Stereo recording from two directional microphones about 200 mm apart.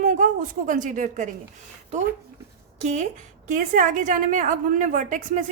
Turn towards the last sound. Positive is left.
turn(degrees=-40)  # may be behind; listen again after turning